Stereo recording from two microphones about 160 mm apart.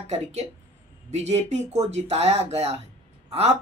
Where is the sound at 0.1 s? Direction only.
40° right (ahead or behind).